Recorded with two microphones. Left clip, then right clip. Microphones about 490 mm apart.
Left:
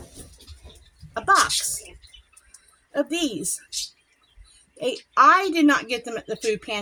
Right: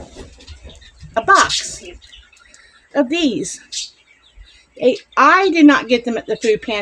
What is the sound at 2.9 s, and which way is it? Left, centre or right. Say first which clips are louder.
Speech: right 8 dB; left.